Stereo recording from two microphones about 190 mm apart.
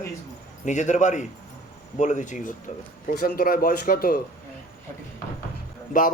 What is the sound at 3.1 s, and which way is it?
A man's voice, 50° left (ahead or behind).